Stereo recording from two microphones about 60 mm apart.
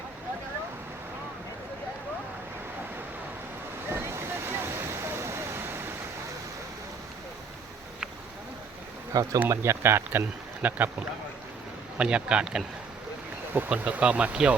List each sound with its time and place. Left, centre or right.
3.8 s a sound: right
9.1 s speech: right
9.5 s speech: right
11.9 s speech: centre
13.5 s speech: right